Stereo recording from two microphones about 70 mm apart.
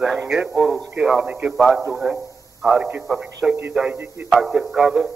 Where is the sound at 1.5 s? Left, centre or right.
Centre.